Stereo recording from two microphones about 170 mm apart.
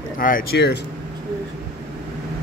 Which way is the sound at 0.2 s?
60° left (ahead or behind).